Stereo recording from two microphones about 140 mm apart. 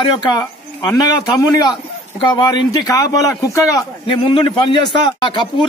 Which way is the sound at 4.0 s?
35° left (ahead or behind).